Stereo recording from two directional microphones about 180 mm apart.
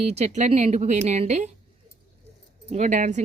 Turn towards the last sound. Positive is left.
turn(degrees=-40)  # may be behind; listen again after turning